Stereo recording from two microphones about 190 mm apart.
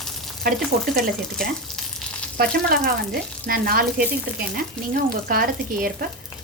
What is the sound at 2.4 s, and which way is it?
Frying, 50° right (ahead or behind).